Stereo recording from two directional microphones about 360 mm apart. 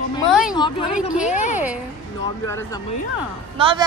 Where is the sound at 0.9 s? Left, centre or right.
Centre.